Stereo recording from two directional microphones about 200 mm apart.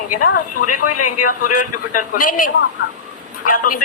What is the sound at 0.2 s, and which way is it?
Speech, 45° left (ahead or behind).